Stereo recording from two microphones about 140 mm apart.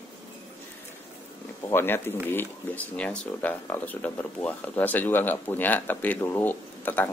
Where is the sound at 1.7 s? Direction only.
15° left (ahead or behind).